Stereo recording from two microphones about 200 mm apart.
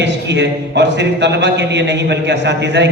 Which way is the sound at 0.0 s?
60° right (ahead or behind).